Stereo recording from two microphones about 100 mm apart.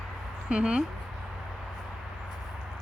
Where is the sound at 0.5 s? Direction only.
10° right (ahead or behind).